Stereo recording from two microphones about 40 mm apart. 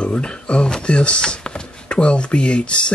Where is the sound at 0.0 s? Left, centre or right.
Left.